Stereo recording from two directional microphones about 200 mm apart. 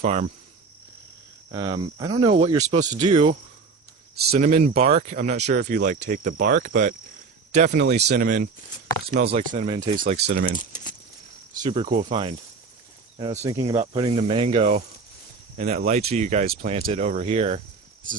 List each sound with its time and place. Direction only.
0.0 s speech: 30° right (ahead or behind)
1.5 s speech: 25° right (ahead or behind)
3.1 s speech: 25° right (ahead or behind)
4.1 s speech: 50° right (ahead or behind)
4.4 s speech: 35° right (ahead or behind)
9.0 s speech: 30° right (ahead or behind)
9.6 s speech: 25° right (ahead or behind)
10.0 s speech: 35° right (ahead or behind)
10.7 s keys jangling: 40° left (ahead or behind)
11.5 s speech: 25° right (ahead or behind)